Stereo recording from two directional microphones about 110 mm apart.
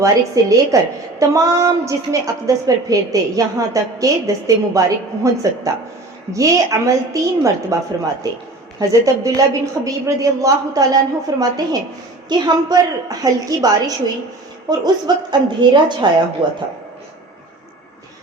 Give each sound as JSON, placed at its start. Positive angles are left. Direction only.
{"t": 0.0, "sound": "a woman's voice", "side_deg": -30}